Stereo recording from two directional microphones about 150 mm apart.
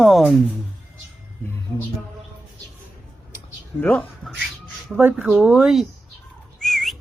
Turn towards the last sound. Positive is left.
turn(degrees=0)  # may be behind; listen again after turning